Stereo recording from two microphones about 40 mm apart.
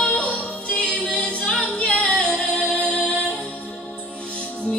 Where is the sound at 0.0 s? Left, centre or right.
Left.